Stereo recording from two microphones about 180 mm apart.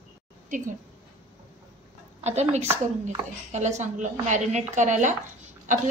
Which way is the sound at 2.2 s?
40° right (ahead or behind).